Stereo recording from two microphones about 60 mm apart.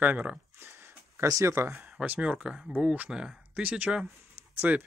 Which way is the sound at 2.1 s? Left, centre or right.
Centre.